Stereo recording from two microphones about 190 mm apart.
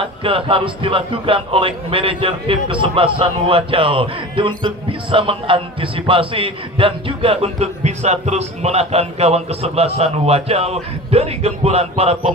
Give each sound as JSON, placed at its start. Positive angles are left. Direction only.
{"t": 0.0, "sound": "a man's voice", "side_deg": -30}